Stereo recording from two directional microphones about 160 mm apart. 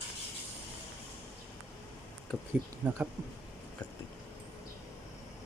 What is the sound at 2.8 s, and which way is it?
Speech, 5° right (ahead or behind).